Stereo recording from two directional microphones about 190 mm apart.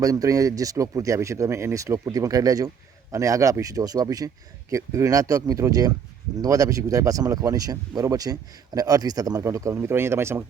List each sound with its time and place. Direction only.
0.0 s speech: 20° right (ahead or behind)